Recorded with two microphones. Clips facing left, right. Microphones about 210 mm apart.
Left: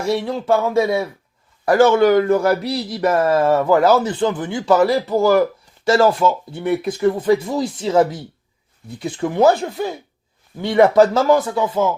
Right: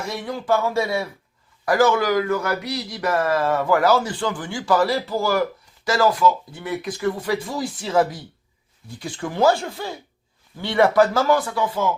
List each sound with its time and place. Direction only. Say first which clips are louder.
0.0 s speech: left 8 dB; 30° left (ahead or behind)